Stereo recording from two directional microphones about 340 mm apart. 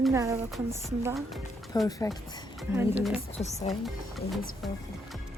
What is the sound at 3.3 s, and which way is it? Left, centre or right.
Speech, centre.